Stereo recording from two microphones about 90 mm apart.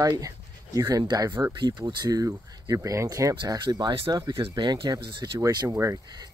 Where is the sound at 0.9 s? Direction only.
50° right (ahead or behind).